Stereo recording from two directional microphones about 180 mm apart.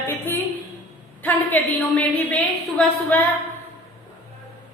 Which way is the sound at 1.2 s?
10° left (ahead or behind).